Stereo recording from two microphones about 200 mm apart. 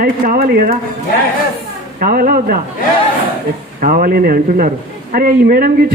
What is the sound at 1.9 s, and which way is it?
Speech, 45° right (ahead or behind).